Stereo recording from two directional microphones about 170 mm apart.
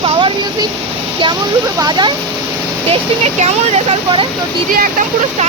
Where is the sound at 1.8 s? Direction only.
25° right (ahead or behind).